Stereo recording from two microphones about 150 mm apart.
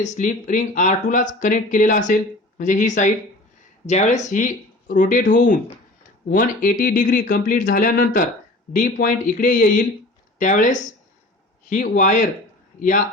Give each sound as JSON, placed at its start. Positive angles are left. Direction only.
{"t": 0.0, "sound": "speech", "side_deg": 55}
{"t": 8.7, "sound": "speech", "side_deg": 60}